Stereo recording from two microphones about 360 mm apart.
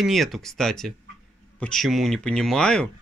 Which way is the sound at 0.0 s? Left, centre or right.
Centre.